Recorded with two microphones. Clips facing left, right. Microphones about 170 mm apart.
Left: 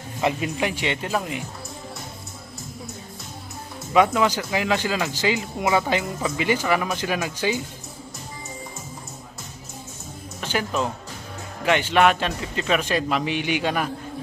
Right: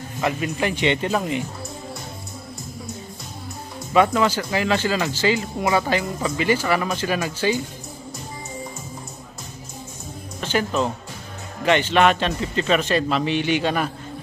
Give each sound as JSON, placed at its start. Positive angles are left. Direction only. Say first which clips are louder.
{"t": 0.6, "sound": "speech", "louder": "right 4 dB", "side_deg": 10}
{"t": 3.9, "sound": "speech", "louder": "right 1 dB", "side_deg": 10}
{"t": 10.5, "sound": "speech", "louder": "right 3 dB", "side_deg": 10}